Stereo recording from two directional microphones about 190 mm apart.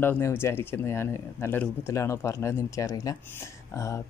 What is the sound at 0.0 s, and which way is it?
Speech, 10° left (ahead or behind).